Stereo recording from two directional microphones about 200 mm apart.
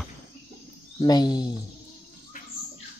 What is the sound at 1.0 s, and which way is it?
Speech, 20° left (ahead or behind).